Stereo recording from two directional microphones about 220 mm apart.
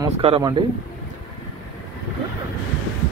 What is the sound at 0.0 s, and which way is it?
Speech, 20° right (ahead or behind).